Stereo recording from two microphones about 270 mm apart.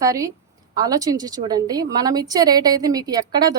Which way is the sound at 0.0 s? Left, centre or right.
Centre.